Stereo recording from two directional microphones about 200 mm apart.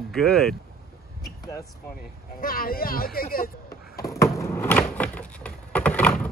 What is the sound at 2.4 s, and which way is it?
Speech, 45° left (ahead or behind).